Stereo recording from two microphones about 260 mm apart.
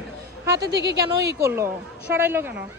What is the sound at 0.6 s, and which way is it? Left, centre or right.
Speech, right.